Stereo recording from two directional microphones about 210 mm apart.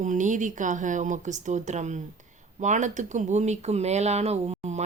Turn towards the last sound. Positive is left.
turn(degrees=-30)  # may be behind; listen again after turning